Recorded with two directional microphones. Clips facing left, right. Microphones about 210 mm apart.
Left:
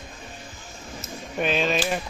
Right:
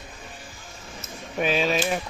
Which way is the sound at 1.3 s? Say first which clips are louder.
Right 1 dB; 5° right (ahead or behind).